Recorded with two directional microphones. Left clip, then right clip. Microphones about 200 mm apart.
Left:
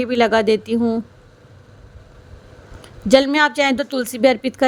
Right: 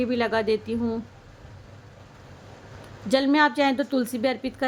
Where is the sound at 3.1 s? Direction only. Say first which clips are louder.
Left 7 dB; 35° left (ahead or behind).